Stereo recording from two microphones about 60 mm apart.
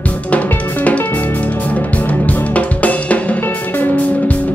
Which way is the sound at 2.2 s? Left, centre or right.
Left.